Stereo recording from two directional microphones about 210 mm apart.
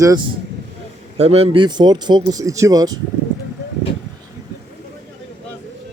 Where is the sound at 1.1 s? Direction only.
30° right (ahead or behind).